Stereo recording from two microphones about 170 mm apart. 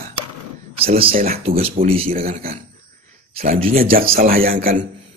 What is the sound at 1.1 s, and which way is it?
Speech, 60° right (ahead or behind).